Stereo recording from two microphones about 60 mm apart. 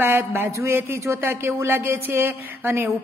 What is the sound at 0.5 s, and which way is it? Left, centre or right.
Speech, right.